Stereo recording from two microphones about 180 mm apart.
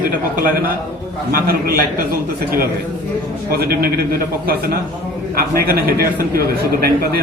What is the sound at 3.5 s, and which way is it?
A man's voice, 60° right (ahead or behind).